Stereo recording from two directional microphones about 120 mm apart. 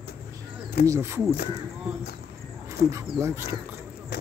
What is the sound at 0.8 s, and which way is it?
Speech, 25° right (ahead or behind).